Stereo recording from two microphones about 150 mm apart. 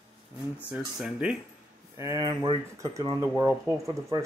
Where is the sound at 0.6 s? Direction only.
5° right (ahead or behind).